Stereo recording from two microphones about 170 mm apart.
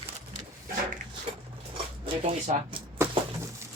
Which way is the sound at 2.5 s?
40° right (ahead or behind).